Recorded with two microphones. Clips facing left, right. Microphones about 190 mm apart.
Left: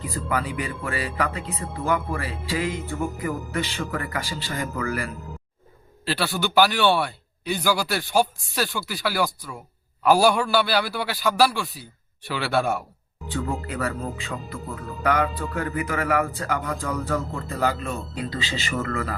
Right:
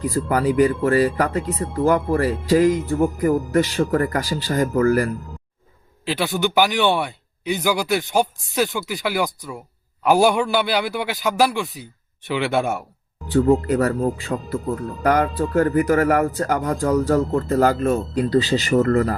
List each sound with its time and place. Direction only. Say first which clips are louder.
0.0 s speech: right 8 dB; 40° right (ahead or behind)
6.1 s speech: right 4 dB; 20° right (ahead or behind)
13.3 s speech: right 12 dB; 40° right (ahead or behind)